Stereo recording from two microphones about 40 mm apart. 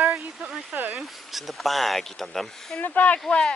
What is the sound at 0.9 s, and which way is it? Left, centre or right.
Speech, centre.